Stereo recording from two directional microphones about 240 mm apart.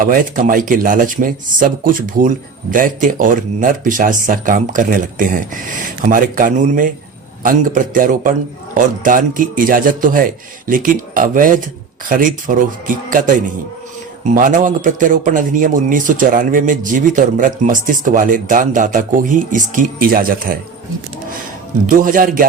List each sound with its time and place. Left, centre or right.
0.0 s speech: right
21.8 s speech: right